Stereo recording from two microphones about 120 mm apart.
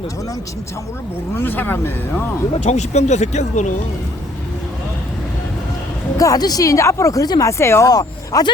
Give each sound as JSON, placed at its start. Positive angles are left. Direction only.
{"t": 1.4, "sound": "speech", "side_deg": 15}
{"t": 2.6, "sound": "speech", "side_deg": 70}
{"t": 6.1, "sound": "speech", "side_deg": 30}